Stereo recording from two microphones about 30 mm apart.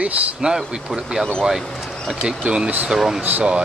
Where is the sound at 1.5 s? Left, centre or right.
Centre.